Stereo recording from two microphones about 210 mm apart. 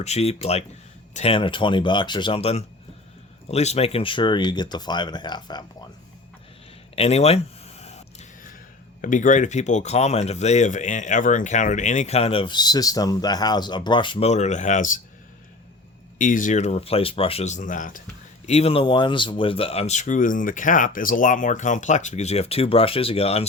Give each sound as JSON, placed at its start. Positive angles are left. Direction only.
{"t": 0.0, "sound": "speech", "side_deg": 30}
{"t": 6.9, "sound": "a sound", "side_deg": 30}
{"t": 9.0, "sound": "speech", "side_deg": 40}
{"t": 16.1, "sound": "speech", "side_deg": 40}